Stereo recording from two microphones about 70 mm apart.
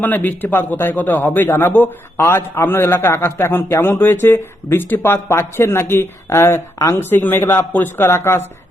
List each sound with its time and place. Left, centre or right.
0.0 s a man's voice: left
7.0 s a man's voice: left